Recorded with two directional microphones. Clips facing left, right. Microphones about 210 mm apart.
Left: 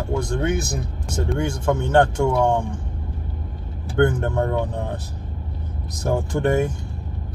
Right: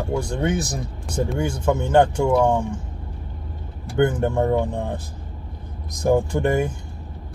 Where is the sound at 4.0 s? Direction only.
10° right (ahead or behind).